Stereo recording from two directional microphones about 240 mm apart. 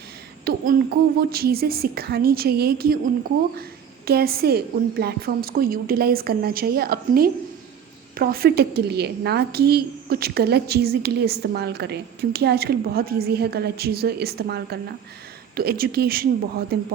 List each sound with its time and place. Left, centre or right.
0.4 s a woman's voice: right
4.0 s a woman's voice: right